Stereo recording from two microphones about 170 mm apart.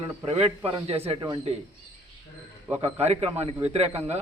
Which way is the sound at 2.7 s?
40° right (ahead or behind).